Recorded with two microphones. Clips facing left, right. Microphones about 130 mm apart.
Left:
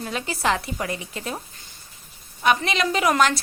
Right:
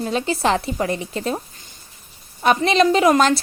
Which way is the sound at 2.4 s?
30° right (ahead or behind).